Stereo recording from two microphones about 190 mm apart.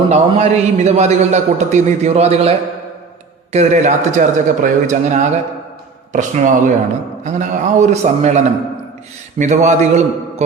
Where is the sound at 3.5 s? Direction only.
40° right (ahead or behind).